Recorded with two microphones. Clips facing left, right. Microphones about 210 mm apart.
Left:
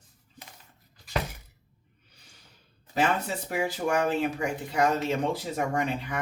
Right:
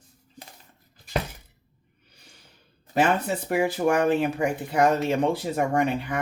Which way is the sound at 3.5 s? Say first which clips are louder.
Right 5 dB; 60° right (ahead or behind).